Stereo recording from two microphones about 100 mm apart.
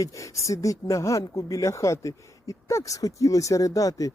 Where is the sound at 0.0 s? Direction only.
35° left (ahead or behind).